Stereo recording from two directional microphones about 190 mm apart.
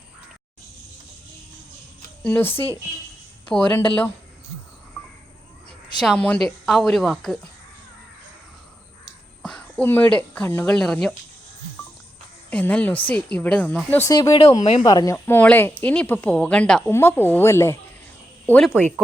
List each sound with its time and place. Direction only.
2.2 s speech: 10° left (ahead or behind)
6.0 s a woman's voice: 5° left (ahead or behind)
9.4 s speech: 5° left (ahead or behind)
12.5 s speech: 5° left (ahead or behind)
14.6 s speech: 30° left (ahead or behind)
14.8 s speech: 20° left (ahead or behind)